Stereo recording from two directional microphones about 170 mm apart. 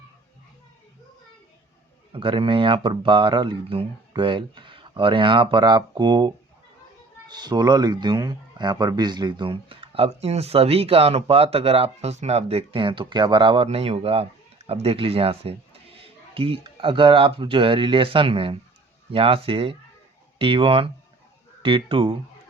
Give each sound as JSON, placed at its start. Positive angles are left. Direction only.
{"t": 2.1, "sound": "speech", "side_deg": -30}